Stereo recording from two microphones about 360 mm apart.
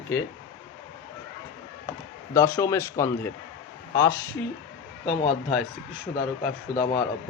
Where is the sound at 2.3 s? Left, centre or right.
Centre.